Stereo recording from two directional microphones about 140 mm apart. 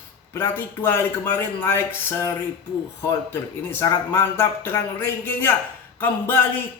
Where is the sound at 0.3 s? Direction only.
15° left (ahead or behind).